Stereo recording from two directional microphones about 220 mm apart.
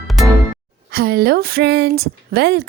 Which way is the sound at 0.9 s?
45° right (ahead or behind).